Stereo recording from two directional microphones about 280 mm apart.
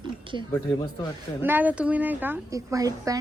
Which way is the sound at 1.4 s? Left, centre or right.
Centre.